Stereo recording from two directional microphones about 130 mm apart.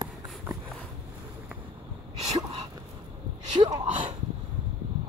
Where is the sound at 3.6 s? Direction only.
40° right (ahead or behind).